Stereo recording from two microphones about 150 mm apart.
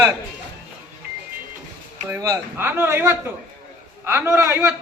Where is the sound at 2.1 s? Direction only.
20° right (ahead or behind).